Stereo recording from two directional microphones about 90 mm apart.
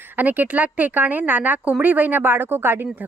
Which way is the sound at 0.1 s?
20° right (ahead or behind).